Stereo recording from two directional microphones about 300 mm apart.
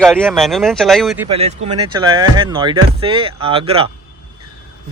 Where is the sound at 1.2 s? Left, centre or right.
Right.